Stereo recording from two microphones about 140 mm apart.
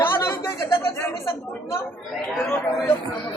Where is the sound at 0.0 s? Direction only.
15° left (ahead or behind).